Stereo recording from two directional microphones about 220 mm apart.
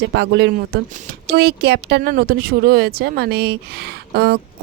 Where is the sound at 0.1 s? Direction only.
50° right (ahead or behind).